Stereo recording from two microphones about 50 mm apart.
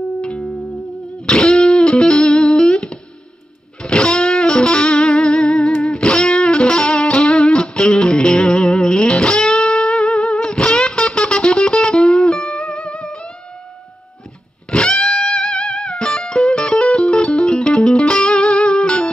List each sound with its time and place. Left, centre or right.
0.2 s music: left
14.7 s music: centre